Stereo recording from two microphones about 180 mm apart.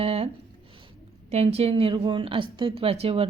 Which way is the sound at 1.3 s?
35° right (ahead or behind).